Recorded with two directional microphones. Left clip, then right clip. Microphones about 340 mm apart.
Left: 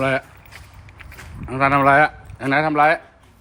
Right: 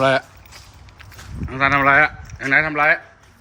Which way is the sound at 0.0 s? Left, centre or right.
Centre.